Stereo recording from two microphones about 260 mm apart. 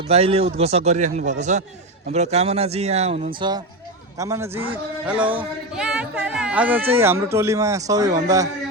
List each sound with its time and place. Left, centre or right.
0.1 s speech: right